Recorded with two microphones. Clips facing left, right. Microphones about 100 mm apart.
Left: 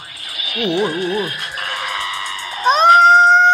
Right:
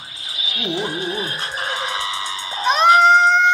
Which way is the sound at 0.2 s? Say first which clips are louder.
Left 7 dB; 65° left (ahead or behind).